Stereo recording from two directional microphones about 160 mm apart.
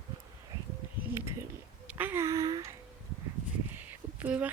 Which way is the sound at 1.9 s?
10° right (ahead or behind).